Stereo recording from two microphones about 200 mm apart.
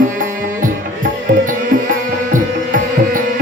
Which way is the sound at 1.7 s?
40° right (ahead or behind).